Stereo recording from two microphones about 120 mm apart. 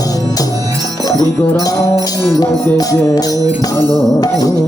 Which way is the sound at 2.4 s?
30° left (ahead or behind).